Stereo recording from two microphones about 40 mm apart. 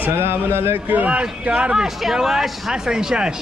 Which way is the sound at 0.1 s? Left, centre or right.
Right.